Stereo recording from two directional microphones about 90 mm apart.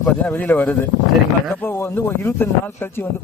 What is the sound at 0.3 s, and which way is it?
Speech, 15° left (ahead or behind).